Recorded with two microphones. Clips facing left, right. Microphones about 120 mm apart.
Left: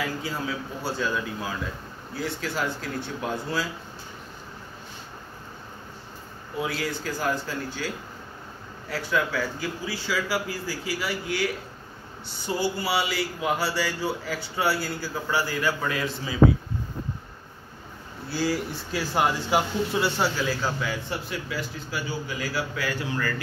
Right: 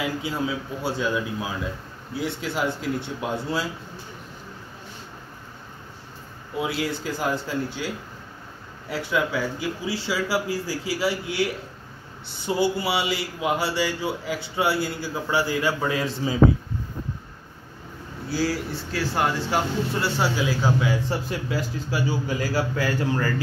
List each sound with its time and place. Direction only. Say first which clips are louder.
0.8 s a man's voice: right 3 dB; 20° right (ahead or behind)
6.6 s a man's voice: right 2 dB; 20° right (ahead or behind)
10.0 s a man's voice: right 2 dB; 30° right (ahead or behind)
12.4 s a man's voice: right 4 dB; 20° right (ahead or behind)
18.3 s speech: right 1 dB; 5° right (ahead or behind)
20.3 s speech: right 3 dB; 10° right (ahead or behind)
20.8 s a man's voice: right 5 dB; 30° right (ahead or behind)